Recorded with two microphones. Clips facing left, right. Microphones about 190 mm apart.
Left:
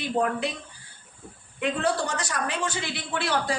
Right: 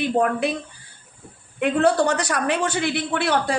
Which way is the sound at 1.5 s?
60° right (ahead or behind).